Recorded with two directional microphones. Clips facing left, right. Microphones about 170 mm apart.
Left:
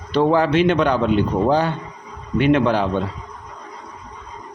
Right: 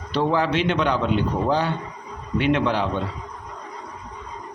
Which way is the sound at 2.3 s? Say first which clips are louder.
Left 5 dB; 45° left (ahead or behind).